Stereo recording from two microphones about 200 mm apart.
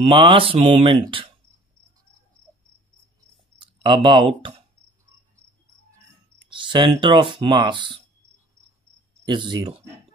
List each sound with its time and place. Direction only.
0.0 s speech: 25° right (ahead or behind)
3.5 s speech: 25° right (ahead or behind)
6.5 s speech: 25° right (ahead or behind)
9.3 s speech: 25° right (ahead or behind)